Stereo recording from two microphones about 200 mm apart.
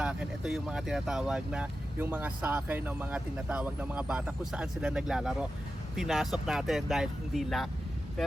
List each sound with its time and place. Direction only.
0.0 s speech: 5° right (ahead or behind)